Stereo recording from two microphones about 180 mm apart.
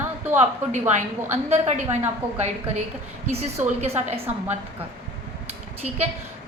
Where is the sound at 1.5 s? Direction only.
40° right (ahead or behind).